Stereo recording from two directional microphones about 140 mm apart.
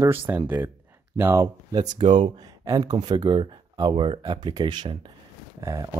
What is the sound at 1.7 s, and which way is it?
Speech, 30° right (ahead or behind).